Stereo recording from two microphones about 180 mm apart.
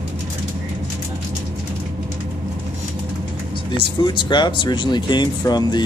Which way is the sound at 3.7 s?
25° left (ahead or behind).